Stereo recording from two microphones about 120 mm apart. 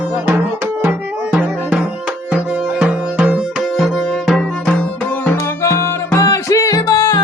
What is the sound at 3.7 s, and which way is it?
Music, centre (ahead or behind).